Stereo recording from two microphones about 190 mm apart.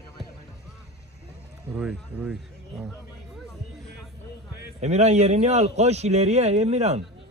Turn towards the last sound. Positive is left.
turn(degrees=-35)  # may be behind; listen again after turning